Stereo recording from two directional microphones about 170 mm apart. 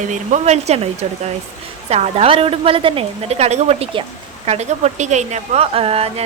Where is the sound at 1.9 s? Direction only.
40° right (ahead or behind).